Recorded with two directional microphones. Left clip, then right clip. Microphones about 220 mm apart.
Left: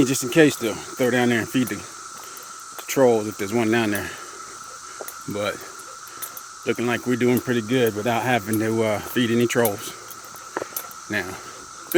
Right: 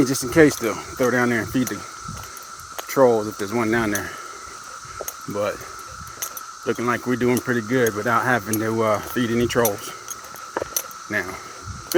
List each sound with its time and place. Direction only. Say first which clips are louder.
0.0 s speech: right 1 dB; 15° left (ahead or behind)
2.9 s speech: right 1 dB; 20° left (ahead or behind)
5.3 s speech: right 2 dB; 20° left (ahead or behind)
6.7 s speech: right 1 dB; 20° left (ahead or behind)
11.1 s speech: right 1 dB; 20° left (ahead or behind)